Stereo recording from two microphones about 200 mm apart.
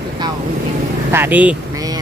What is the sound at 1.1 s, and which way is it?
Speech, 10° right (ahead or behind).